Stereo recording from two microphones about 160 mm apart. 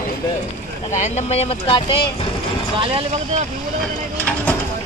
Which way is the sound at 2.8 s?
35° right (ahead or behind).